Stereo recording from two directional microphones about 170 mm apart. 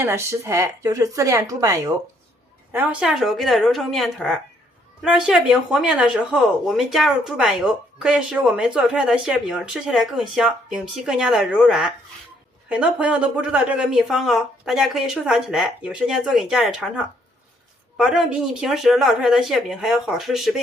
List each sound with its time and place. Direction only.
0.0 s speech: 15° right (ahead or behind)
2.7 s speech: 10° right (ahead or behind)
17.9 s speech: 5° right (ahead or behind)